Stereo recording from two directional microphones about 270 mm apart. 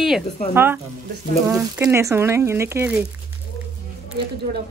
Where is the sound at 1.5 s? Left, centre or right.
Centre.